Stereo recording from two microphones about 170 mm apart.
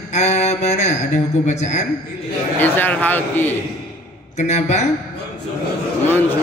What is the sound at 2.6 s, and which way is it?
Speech, 10° left (ahead or behind).